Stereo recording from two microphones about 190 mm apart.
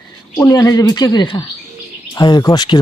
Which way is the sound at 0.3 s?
20° left (ahead or behind).